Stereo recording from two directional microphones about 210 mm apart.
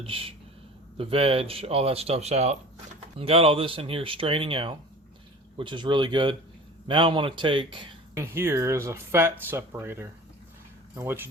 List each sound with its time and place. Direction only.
0.0 s speech: 25° right (ahead or behind)
8.1 s speech: 15° right (ahead or behind)